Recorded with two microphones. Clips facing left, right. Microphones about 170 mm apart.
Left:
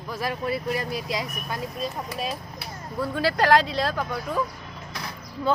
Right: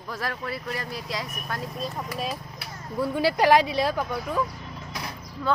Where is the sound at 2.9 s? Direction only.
15° right (ahead or behind).